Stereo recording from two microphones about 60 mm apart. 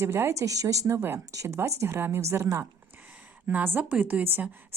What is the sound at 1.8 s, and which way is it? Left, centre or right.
Speech, right.